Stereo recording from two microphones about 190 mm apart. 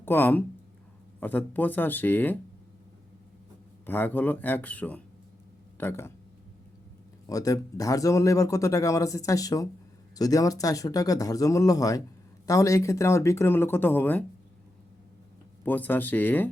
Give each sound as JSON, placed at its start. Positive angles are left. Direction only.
{"t": 0.0, "sound": "speech", "side_deg": 10}
{"t": 3.8, "sound": "speech", "side_deg": 10}
{"t": 7.3, "sound": "speech", "side_deg": 20}
{"t": 15.6, "sound": "speech", "side_deg": 10}